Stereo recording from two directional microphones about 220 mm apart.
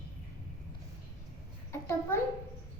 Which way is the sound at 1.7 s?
10° left (ahead or behind).